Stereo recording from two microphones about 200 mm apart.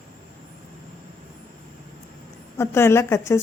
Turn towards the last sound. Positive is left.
turn(degrees=15)  # may be behind; listen again after turning